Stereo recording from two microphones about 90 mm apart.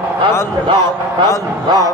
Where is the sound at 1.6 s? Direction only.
45° right (ahead or behind).